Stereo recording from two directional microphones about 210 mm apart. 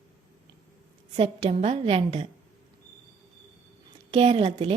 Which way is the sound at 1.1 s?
30° right (ahead or behind).